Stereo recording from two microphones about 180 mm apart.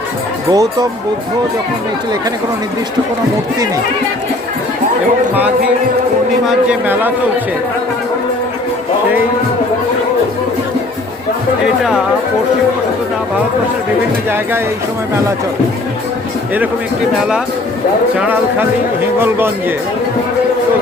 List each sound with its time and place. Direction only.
0.5 s speech: 20° right (ahead or behind)
6.5 s speech: 5° right (ahead or behind)
11.6 s speech: 5° right (ahead or behind)
17.2 s speech: 5° right (ahead or behind)
19.2 s speech: 10° right (ahead or behind)